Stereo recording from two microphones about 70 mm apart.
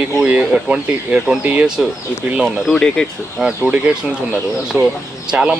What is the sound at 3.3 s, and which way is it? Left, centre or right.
Speech, centre.